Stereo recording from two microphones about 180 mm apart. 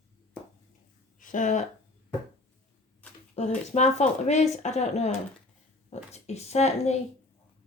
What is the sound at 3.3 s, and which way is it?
Speech, 40° left (ahead or behind).